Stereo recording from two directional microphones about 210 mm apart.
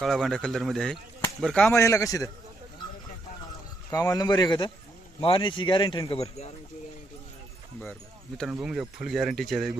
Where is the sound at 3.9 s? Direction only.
15° left (ahead or behind).